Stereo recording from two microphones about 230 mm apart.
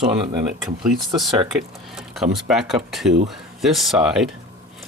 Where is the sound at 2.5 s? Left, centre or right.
Centre.